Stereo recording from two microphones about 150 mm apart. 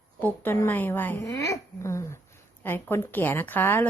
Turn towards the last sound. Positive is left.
turn(degrees=15)  # may be behind; listen again after turning